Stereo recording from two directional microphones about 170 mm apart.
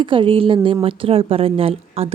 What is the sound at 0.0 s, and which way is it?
A woman's voice, 30° right (ahead or behind).